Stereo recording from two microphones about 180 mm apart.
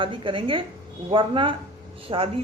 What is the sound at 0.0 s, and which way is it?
A woman's voice, 30° right (ahead or behind).